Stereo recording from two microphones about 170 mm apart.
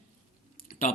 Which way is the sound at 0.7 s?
55° left (ahead or behind).